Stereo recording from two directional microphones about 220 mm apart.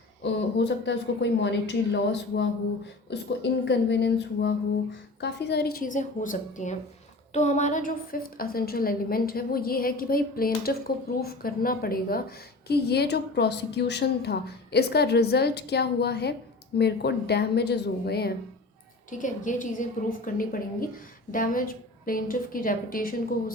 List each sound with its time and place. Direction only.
0.2 s a woman's voice: 50° left (ahead or behind)
19.1 s a woman's voice: 35° left (ahead or behind)